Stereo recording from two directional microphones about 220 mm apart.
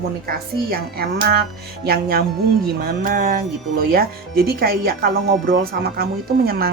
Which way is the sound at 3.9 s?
45° right (ahead or behind).